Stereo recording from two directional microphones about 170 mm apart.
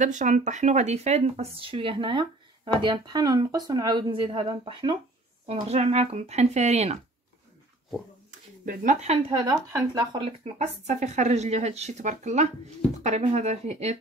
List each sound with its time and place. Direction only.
0.0 s speech: 45° right (ahead or behind)
8.3 s a sound: 50° right (ahead or behind)
9.3 s speech: 25° right (ahead or behind)
10.4 s speech: 45° right (ahead or behind)